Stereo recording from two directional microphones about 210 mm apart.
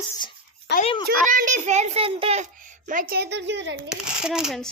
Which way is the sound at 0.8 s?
25° left (ahead or behind).